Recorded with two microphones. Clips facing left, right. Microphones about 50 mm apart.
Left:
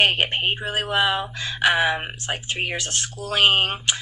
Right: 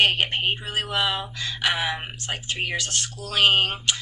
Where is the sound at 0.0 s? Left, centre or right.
Left.